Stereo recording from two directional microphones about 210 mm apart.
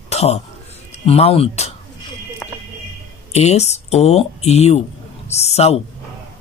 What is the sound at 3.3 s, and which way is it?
Speech, 30° left (ahead or behind).